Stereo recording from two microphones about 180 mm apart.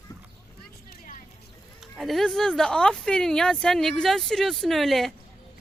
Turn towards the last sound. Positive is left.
turn(degrees=0)  # may be behind; listen again after turning